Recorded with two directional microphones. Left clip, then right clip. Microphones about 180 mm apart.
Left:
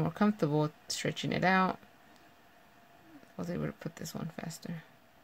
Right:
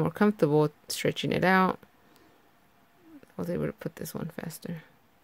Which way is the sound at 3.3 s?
35° right (ahead or behind).